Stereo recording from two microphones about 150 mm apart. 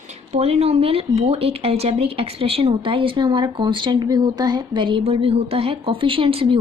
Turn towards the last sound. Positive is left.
turn(degrees=-35)  # may be behind; listen again after turning